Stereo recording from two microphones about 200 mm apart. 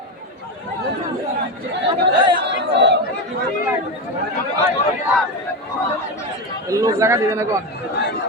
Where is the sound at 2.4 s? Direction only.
60° right (ahead or behind).